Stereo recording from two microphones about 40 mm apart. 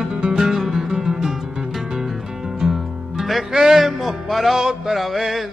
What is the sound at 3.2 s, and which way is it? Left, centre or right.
Music, centre.